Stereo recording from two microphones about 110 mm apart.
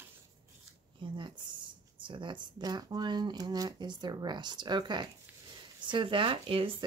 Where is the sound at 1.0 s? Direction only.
45° right (ahead or behind).